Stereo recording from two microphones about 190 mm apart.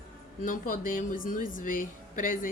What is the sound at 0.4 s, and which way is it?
Speech, 45° left (ahead or behind).